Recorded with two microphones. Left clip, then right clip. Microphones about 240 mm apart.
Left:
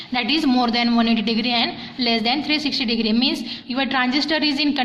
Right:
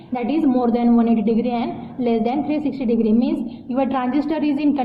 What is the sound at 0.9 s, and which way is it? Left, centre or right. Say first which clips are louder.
A man's voice: right 1 dB; left.